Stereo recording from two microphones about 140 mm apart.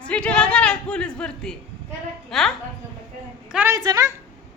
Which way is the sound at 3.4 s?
10° right (ahead or behind).